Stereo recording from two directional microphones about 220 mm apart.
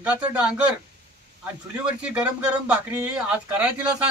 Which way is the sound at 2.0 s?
5° right (ahead or behind).